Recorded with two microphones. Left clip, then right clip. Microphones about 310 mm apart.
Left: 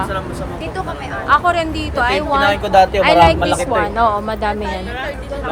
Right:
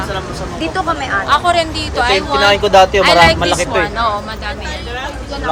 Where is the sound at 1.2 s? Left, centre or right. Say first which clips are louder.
Even; centre.